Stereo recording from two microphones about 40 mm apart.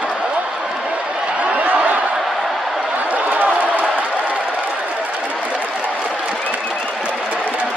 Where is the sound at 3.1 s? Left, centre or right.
Right.